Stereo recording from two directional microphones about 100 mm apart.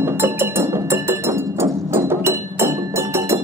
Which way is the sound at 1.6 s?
25° right (ahead or behind).